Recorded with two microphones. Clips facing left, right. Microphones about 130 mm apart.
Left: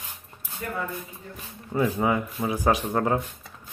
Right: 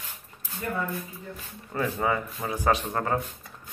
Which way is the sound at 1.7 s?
15° left (ahead or behind).